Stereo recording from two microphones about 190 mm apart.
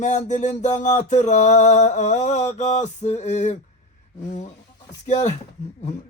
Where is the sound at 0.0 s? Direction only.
40° left (ahead or behind).